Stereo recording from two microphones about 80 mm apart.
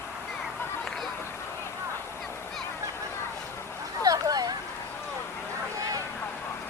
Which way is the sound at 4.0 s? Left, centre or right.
Right.